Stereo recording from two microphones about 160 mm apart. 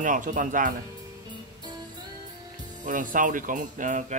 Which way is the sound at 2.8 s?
55° right (ahead or behind).